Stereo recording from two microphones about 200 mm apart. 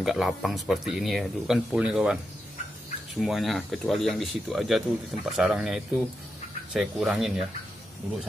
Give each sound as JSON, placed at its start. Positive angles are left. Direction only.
{"t": 0.0, "sound": "speech", "side_deg": 0}
{"t": 3.2, "sound": "speech", "side_deg": 0}